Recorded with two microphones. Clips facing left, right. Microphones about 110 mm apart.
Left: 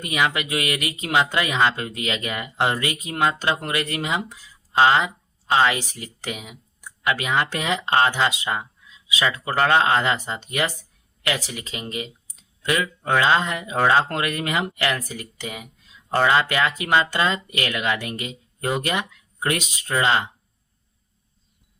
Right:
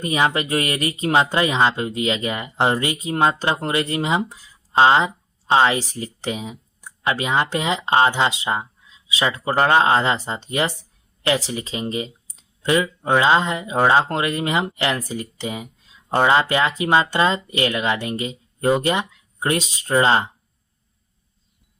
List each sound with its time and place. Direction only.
0.0 s speech: 30° right (ahead or behind)